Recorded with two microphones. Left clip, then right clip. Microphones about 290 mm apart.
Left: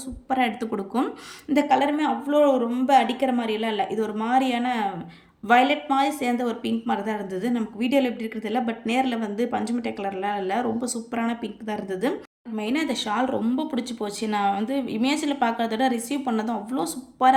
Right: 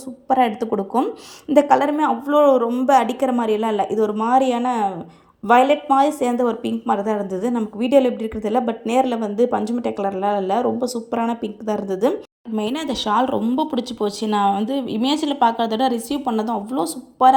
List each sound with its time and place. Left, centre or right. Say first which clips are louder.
0.3 s a woman's voice: right 7 dB; centre
0.7 s speech: right 7 dB; right
1.0 s a woman's voice: right 5 dB; centre